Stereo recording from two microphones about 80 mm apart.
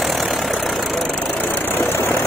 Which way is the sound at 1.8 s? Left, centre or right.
Left.